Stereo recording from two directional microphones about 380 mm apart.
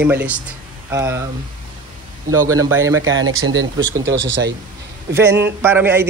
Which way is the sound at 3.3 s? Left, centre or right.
Right.